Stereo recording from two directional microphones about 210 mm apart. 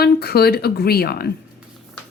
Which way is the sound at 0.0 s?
50° left (ahead or behind).